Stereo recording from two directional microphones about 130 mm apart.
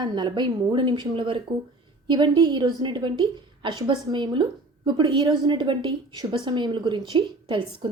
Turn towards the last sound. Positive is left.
turn(degrees=-40)  # may be behind; listen again after turning